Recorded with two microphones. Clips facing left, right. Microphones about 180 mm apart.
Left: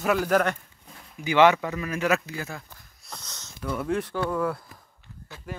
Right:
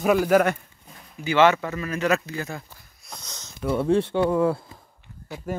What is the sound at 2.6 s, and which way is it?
Speech, 15° right (ahead or behind).